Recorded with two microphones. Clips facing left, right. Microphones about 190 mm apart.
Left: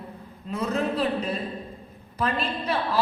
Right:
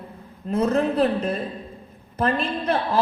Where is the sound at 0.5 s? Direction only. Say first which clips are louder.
Right 6 dB; 50° right (ahead or behind).